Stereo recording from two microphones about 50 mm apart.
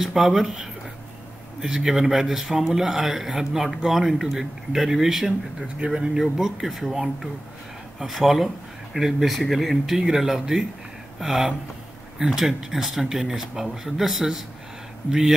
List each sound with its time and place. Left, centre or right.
0.0 s speech: centre
5.8 s speech: right
6.2 s speech: centre